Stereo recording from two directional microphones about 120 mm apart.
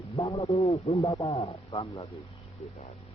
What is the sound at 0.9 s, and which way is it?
Speech, 25° left (ahead or behind).